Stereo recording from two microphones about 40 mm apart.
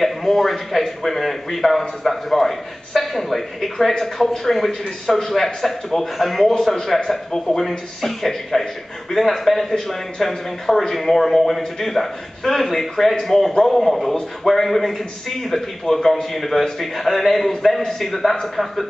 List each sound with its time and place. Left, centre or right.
0.0 s a man's voice: centre